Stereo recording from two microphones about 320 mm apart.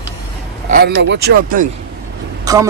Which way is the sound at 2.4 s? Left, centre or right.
Centre.